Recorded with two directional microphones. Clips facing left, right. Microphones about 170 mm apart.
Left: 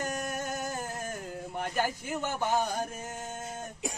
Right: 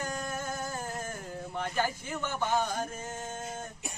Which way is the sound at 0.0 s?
15° left (ahead or behind).